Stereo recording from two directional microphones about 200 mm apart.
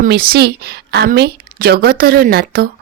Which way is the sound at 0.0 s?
50° right (ahead or behind).